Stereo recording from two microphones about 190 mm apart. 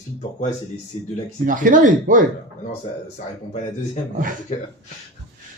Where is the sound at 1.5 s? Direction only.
45° right (ahead or behind).